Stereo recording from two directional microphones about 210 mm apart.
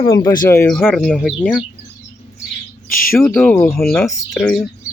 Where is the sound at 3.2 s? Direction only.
10° left (ahead or behind).